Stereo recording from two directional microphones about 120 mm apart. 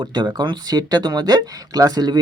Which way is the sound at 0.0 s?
40° right (ahead or behind).